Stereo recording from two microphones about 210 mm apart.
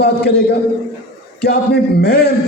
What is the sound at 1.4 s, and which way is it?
Speech, 45° left (ahead or behind).